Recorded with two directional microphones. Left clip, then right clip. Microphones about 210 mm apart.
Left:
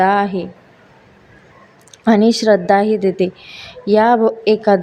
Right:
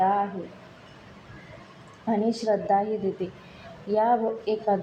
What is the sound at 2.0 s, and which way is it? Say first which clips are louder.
A woman's voice: left 13 dB; 40° left (ahead or behind).